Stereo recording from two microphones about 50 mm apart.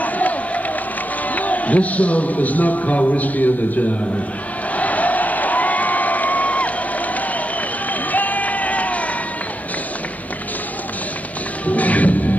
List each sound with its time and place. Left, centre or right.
1.3 s a man's voice: left
4.7 s crowd: left
7.9 s a sound: left
11.6 s music: left